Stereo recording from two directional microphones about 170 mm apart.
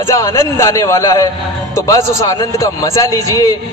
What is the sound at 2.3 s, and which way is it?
Speech, 20° left (ahead or behind).